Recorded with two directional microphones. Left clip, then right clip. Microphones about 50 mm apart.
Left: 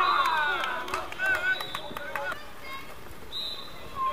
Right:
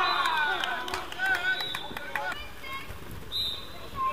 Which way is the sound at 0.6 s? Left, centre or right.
Right.